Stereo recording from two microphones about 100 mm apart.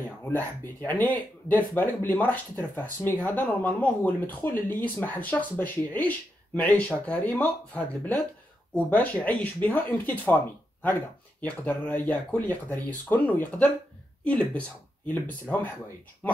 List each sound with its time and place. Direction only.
0.2 s speech: 20° left (ahead or behind)
11.4 s speech: 15° left (ahead or behind)